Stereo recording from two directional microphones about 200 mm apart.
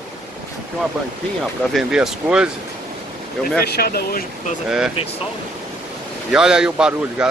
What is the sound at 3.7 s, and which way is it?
Speech, 50° left (ahead or behind).